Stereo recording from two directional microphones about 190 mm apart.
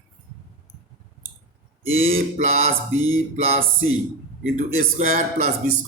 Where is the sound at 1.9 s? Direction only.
90° right.